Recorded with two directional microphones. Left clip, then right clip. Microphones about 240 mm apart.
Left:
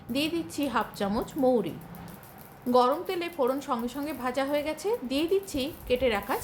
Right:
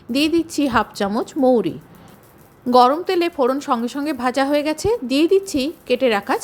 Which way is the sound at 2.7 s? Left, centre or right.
Right.